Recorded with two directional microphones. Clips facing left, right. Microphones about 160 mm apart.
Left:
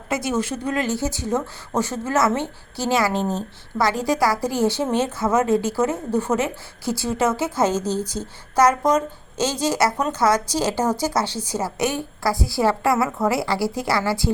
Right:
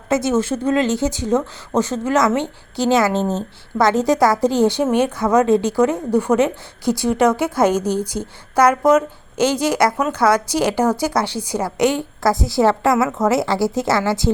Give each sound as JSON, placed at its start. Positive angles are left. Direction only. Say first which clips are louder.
{"t": 0.1, "sound": "a woman's voice", "louder": "right 6 dB", "side_deg": -25}
{"t": 9.7, "sound": "speech", "louder": "right 3 dB", "side_deg": 10}
{"t": 10.2, "sound": "a woman's voice", "louder": "right 4 dB", "side_deg": -10}